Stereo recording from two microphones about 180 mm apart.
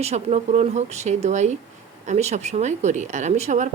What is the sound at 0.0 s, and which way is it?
Speech, 35° right (ahead or behind).